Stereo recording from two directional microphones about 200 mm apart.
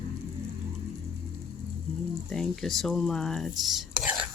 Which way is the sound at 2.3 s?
Centre (ahead or behind).